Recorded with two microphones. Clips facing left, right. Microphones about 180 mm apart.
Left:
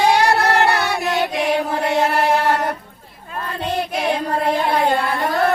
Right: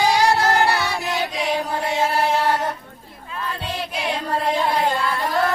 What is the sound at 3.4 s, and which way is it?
Child singing, 55° left (ahead or behind).